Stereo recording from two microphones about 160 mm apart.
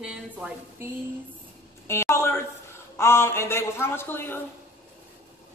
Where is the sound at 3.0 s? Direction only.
15° left (ahead or behind).